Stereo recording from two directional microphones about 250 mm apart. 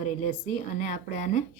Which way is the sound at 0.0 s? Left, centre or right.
Left.